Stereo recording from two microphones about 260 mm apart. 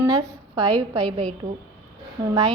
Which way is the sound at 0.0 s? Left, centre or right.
Centre.